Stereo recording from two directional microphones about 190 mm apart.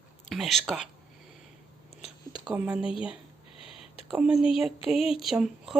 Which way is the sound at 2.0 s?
30° left (ahead or behind).